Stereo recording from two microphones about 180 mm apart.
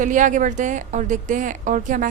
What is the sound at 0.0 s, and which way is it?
Speech, 45° right (ahead or behind).